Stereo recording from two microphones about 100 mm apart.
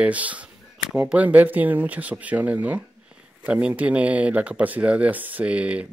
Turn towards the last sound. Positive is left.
turn(degrees=-10)  # may be behind; listen again after turning